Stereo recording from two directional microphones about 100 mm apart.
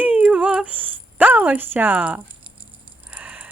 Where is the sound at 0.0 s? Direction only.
15° right (ahead or behind).